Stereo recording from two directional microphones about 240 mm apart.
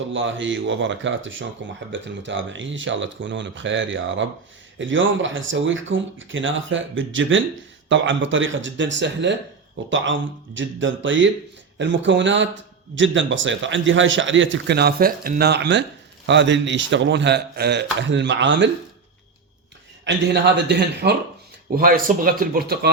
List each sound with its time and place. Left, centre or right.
0.1 s speech: right
20.1 s speech: right